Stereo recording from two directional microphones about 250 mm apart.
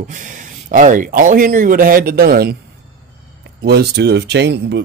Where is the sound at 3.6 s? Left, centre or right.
Right.